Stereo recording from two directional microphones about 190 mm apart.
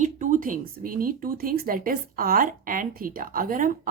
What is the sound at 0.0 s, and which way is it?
Speech, 40° right (ahead or behind).